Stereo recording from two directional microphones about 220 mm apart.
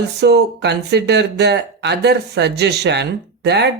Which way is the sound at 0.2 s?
50° right (ahead or behind).